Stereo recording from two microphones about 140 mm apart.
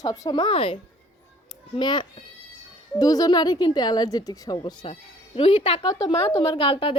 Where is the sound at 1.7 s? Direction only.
30° left (ahead or behind).